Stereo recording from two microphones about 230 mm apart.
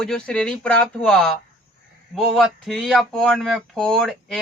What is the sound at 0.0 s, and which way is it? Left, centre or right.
Speech, centre.